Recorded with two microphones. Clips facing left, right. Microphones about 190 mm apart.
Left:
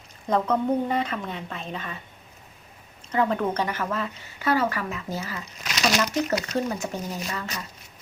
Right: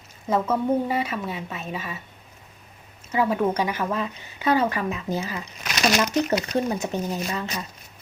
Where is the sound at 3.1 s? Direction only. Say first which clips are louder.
Right 2 dB; 10° right (ahead or behind).